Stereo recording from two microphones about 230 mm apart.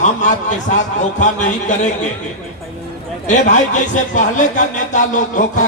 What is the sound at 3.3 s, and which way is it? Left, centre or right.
Speech, left.